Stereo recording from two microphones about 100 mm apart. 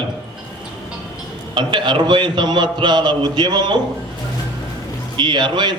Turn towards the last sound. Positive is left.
turn(degrees=-50)  # may be behind; listen again after turning